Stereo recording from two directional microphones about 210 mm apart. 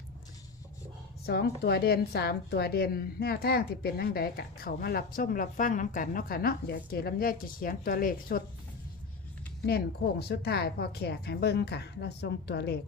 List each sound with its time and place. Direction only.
1.2 s a woman's voice: 50° left (ahead or behind)
9.6 s a woman's voice: 50° left (ahead or behind)